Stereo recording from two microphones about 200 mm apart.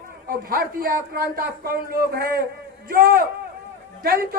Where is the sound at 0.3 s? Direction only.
45° right (ahead or behind).